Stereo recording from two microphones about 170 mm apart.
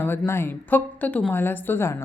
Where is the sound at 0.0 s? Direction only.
15° left (ahead or behind).